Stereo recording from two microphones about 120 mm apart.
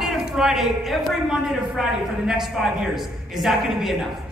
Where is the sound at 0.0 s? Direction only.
5° right (ahead or behind).